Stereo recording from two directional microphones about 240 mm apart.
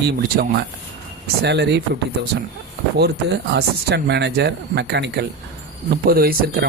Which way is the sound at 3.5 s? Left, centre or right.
Right.